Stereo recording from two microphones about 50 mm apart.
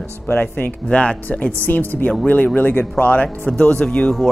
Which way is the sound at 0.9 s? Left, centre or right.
Left.